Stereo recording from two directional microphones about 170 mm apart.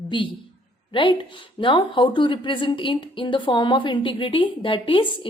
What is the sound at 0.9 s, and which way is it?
A woman's voice, 30° left (ahead or behind).